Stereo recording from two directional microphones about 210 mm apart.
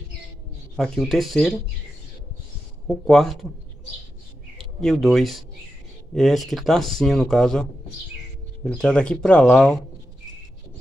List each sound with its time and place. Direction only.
0.7 s speech: centre (ahead or behind)
2.9 s speech: centre (ahead or behind)
4.6 s speech: centre (ahead or behind)
8.6 s speech: 5° left (ahead or behind)